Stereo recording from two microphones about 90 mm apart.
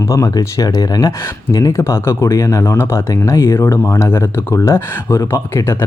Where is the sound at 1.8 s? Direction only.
30° left (ahead or behind).